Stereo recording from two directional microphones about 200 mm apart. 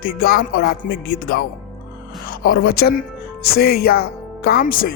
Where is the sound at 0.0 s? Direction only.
50° left (ahead or behind).